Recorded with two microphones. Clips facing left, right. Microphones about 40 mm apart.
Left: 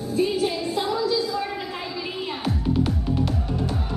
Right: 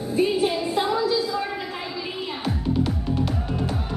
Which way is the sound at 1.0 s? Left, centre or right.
Centre.